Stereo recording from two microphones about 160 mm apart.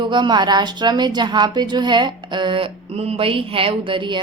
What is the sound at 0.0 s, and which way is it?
A woman's voice, 30° right (ahead or behind).